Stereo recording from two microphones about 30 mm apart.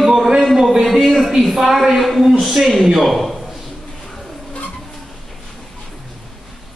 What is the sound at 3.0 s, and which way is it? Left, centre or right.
Speech, centre.